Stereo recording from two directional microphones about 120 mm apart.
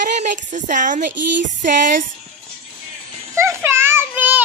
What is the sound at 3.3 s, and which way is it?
Child singing, 25° right (ahead or behind).